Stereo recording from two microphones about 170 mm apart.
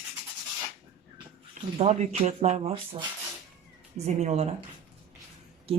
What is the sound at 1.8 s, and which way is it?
A woman's voice, 40° right (ahead or behind).